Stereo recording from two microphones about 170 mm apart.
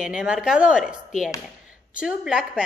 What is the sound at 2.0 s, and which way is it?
Speech, 5° right (ahead or behind).